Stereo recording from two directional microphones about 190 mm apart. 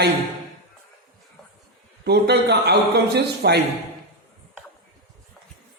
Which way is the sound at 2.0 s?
60° right (ahead or behind).